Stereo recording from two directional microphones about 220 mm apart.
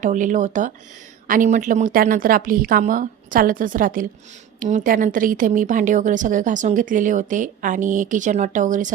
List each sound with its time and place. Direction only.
0.0 s a woman's voice: 35° right (ahead or behind)